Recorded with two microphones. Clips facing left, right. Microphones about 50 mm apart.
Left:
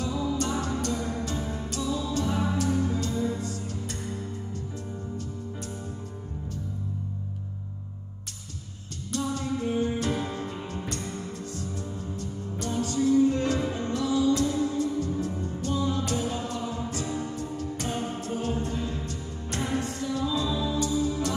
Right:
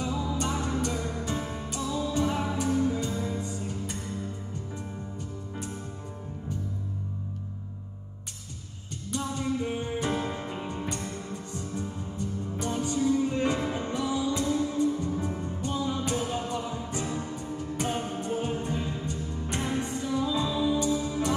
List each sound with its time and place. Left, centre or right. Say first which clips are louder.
0.4 s music: left 1 dB; centre
0.9 s music: left 2 dB; centre
1.2 s music: left 1 dB; centre
3.3 s music: even; centre
9.1 s music: left 1 dB; centre
11.1 s music: left 1 dB; centre
11.5 s music: right 1 dB; centre
17.7 s music: right 3 dB; centre